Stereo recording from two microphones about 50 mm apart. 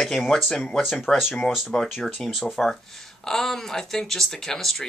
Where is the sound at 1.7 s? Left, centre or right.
Centre.